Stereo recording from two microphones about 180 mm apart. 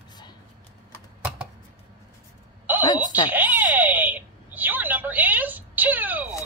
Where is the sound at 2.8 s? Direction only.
25° left (ahead or behind).